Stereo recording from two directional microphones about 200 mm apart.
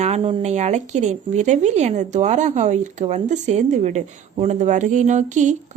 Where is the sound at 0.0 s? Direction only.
30° right (ahead or behind).